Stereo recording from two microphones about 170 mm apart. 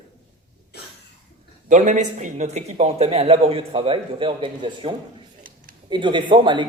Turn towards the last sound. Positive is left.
turn(degrees=-25)  # may be behind; listen again after turning